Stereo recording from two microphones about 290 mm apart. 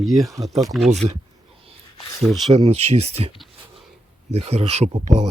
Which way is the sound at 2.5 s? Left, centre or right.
Right.